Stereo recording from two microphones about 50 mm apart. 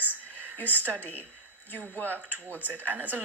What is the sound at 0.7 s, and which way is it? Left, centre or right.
Speech, right.